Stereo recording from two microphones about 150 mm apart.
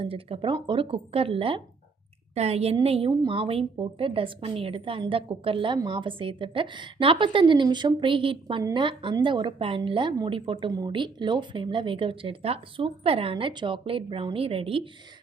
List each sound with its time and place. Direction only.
0.0 s a woman's voice: 40° right (ahead or behind)